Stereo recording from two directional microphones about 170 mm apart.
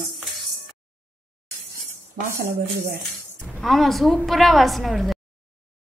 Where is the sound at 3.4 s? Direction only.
5° right (ahead or behind).